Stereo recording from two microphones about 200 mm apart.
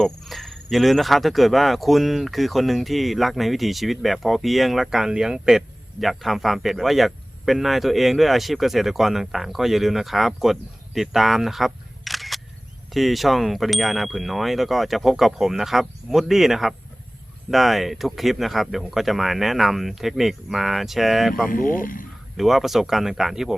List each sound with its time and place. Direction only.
0.0 s speech: centre (ahead or behind)
21.5 s speech: 45° left (ahead or behind)
22.4 s speech: centre (ahead or behind)